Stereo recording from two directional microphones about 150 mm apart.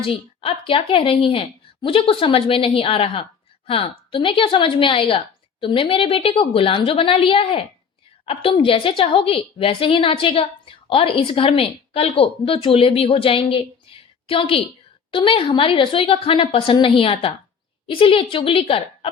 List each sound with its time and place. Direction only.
0.0 s a woman's voice: 35° left (ahead or behind)